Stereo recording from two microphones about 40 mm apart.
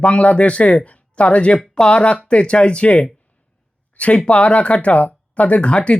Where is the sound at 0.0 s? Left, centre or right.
Left.